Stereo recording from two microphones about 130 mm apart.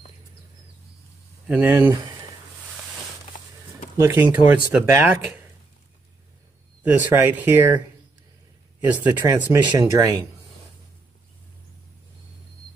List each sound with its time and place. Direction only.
1.5 s speech: 15° right (ahead or behind)
3.9 s speech: 20° right (ahead or behind)
6.8 s speech: 10° right (ahead or behind)
8.8 s speech: 15° right (ahead or behind)